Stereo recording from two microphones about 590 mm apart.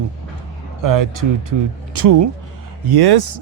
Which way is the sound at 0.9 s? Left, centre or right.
Right.